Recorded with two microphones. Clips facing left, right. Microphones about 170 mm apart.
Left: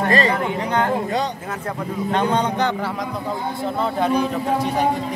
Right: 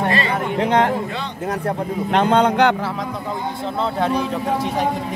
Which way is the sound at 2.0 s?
65° right (ahead or behind).